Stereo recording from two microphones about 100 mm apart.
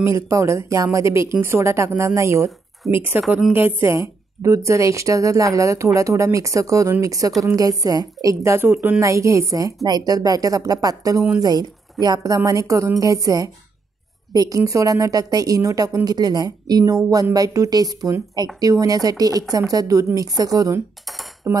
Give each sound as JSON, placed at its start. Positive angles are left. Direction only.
{"t": 0.0, "sound": "speech", "side_deg": -30}
{"t": 3.1, "sound": "a woman's voice", "side_deg": -15}
{"t": 21.5, "sound": "speech", "side_deg": -20}